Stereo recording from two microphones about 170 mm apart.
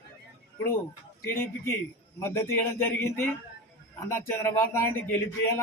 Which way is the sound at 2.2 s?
15° left (ahead or behind).